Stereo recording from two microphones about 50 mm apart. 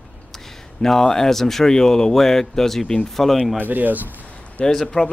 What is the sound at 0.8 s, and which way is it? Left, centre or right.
A man's voice, centre.